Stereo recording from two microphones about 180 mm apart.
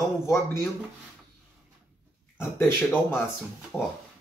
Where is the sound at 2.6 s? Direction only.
10° left (ahead or behind).